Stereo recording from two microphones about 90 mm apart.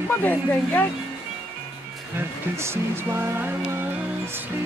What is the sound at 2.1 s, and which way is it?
Speech, 30° right (ahead or behind).